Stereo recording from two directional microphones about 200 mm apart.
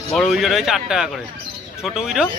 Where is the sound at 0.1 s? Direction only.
Centre (ahead or behind).